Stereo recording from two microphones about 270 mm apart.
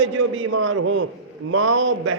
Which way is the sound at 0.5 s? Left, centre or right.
Right.